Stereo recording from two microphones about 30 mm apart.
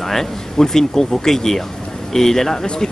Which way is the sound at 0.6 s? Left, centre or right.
Centre.